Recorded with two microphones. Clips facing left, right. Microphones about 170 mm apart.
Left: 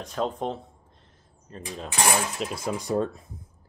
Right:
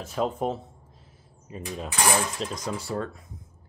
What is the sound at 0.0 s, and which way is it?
Speech, 5° right (ahead or behind).